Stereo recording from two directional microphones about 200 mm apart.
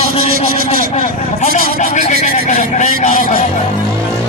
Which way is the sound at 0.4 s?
35° left (ahead or behind).